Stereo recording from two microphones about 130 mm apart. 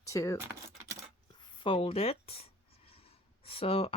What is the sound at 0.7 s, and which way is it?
Coin, 20° right (ahead or behind).